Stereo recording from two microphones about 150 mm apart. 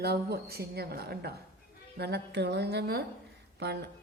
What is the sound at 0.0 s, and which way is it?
A woman's voice, 90° right.